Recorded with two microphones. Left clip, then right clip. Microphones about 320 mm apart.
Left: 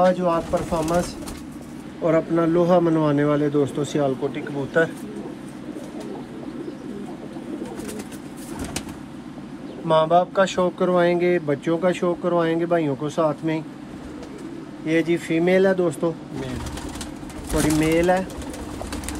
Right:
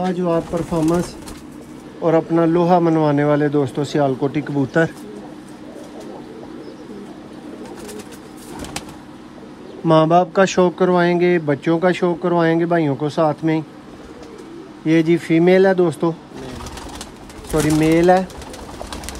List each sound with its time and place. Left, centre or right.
0.0 s speech: centre
2.0 s speech: right
9.8 s speech: right
14.9 s speech: right
17.7 s speech: right